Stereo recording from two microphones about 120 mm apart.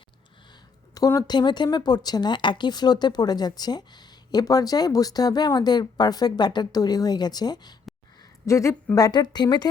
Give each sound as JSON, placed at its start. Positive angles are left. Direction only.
{"t": 0.5, "sound": "speech", "side_deg": 30}
{"t": 8.2, "sound": "a sound", "side_deg": 25}
{"t": 9.0, "sound": "speech", "side_deg": 35}